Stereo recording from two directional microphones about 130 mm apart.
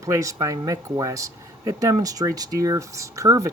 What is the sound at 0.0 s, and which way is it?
Speech, 25° right (ahead or behind).